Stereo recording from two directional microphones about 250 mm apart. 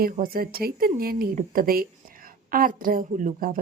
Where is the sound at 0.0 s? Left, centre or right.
Right.